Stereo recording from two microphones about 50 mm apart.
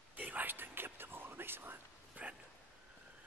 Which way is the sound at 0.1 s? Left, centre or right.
Right.